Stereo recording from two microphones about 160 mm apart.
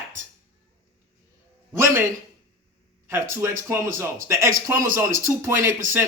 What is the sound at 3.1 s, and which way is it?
Speech, 15° right (ahead or behind).